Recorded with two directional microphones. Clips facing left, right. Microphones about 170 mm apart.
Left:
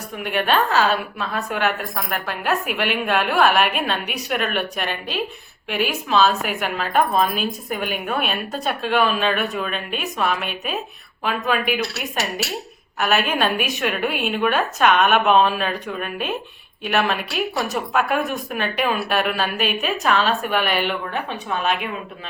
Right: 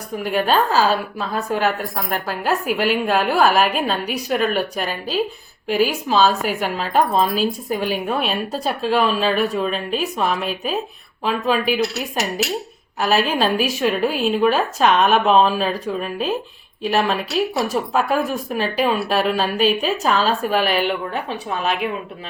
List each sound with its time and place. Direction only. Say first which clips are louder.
0.2 s a woman's voice: right 2 dB; 35° right (ahead or behind)
13.0 s a woman's voice: right 2 dB; 30° right (ahead or behind)